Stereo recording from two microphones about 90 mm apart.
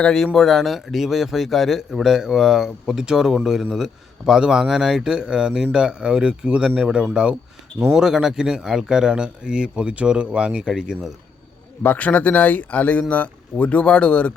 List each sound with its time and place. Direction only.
0.0 s a man's voice: 5° left (ahead or behind)
11.8 s speech: 20° left (ahead or behind)